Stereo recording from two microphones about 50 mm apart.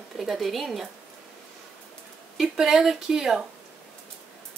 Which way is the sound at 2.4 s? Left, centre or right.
Centre.